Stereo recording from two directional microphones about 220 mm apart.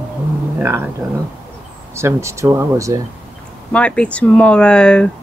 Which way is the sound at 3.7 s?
5° left (ahead or behind).